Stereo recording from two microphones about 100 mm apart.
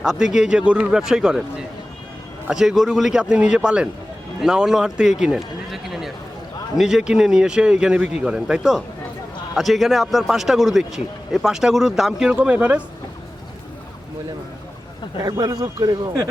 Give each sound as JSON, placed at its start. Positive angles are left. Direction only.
{"t": 0.0, "sound": "a man's voice", "side_deg": -5}
{"t": 15.2, "sound": "a man's voice", "side_deg": -40}